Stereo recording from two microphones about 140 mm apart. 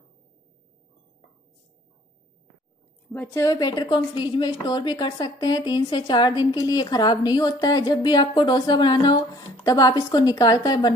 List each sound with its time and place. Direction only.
3.1 s a woman's voice: 10° left (ahead or behind)
3.3 s a woman's voice: 30° left (ahead or behind)